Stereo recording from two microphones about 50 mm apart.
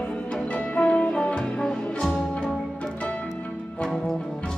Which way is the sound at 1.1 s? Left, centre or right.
Centre.